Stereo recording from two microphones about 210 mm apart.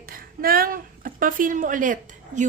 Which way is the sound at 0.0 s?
45° right (ahead or behind).